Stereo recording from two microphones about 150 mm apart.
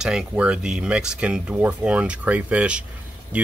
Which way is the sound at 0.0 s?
5° right (ahead or behind).